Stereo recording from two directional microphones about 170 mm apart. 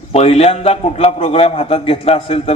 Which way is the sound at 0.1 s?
35° left (ahead or behind).